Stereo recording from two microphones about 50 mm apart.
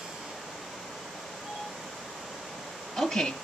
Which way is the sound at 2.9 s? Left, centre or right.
Centre.